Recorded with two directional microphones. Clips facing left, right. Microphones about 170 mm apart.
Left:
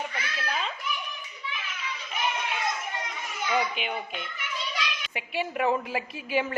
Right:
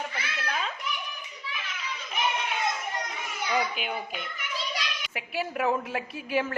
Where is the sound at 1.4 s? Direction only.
40° right (ahead or behind).